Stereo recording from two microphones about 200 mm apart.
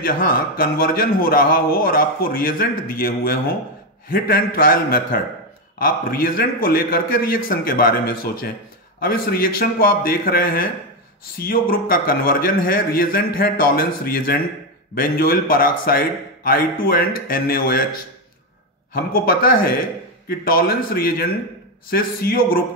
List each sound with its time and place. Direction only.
0.0 s a man's voice: 45° left (ahead or behind)
18.9 s a man's voice: 45° left (ahead or behind)